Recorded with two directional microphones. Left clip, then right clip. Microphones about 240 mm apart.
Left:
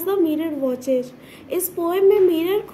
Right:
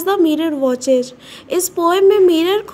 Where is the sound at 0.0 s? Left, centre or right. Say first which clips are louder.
Right 6 dB; right.